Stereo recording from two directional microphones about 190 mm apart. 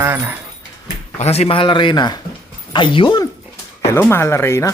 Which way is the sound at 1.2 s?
35° left (ahead or behind).